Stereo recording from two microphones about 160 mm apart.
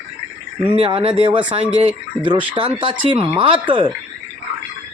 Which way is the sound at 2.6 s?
30° right (ahead or behind).